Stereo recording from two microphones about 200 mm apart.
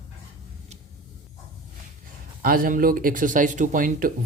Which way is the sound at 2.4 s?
45° right (ahead or behind).